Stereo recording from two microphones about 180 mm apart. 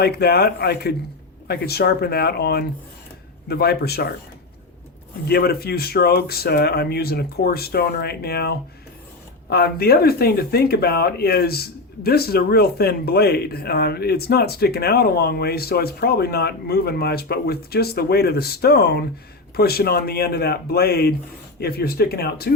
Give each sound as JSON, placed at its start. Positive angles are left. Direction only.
{"t": 0.0, "sound": "speech", "side_deg": 60}
{"t": 5.3, "sound": "speech", "side_deg": 60}